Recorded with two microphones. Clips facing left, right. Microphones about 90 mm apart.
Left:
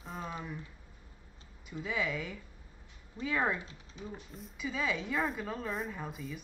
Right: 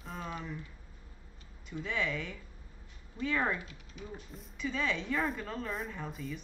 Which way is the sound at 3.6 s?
30° left (ahead or behind).